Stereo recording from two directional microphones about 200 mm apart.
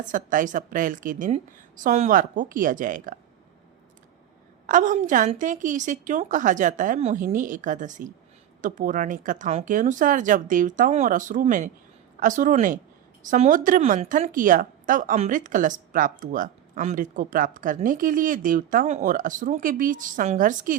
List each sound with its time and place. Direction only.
0.0 s a woman's voice: 40° right (ahead or behind)
4.6 s a woman's voice: 40° right (ahead or behind)